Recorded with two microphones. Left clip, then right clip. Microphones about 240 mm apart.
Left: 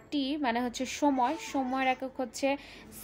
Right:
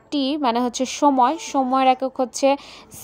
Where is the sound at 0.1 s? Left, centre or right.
Right.